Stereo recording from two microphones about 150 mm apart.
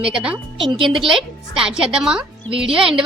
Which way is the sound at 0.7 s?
35° right (ahead or behind).